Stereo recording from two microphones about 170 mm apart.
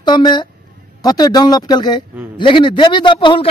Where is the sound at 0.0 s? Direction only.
25° left (ahead or behind).